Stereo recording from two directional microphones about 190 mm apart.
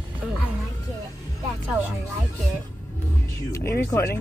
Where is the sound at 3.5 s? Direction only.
15° left (ahead or behind).